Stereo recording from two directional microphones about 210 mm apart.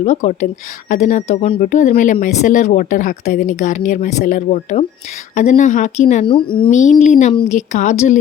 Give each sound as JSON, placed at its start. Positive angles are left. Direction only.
{"t": 0.0, "sound": "speech", "side_deg": 35}
{"t": 6.7, "sound": "speech", "side_deg": 35}